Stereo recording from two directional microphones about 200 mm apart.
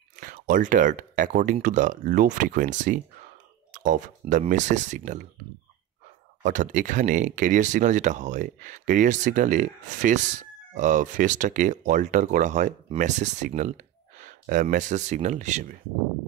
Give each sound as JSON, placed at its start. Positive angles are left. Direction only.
{"t": 0.1, "sound": "speech", "side_deg": -40}
{"t": 6.4, "sound": "speech", "side_deg": -40}